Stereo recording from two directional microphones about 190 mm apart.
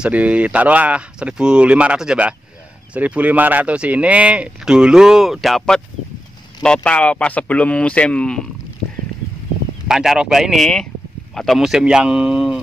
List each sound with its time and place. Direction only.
0.0 s speech: 5° right (ahead or behind)
9.8 s a man's voice: 5° right (ahead or behind)